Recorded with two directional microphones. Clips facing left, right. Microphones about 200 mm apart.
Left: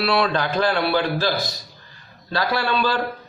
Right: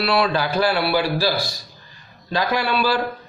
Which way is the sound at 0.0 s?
Centre (ahead or behind).